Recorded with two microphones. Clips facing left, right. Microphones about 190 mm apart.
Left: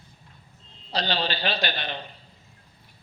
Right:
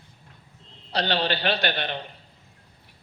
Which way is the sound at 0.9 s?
65° right (ahead or behind).